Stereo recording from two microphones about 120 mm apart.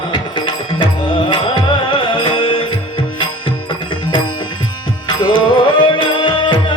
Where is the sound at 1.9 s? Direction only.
45° left (ahead or behind).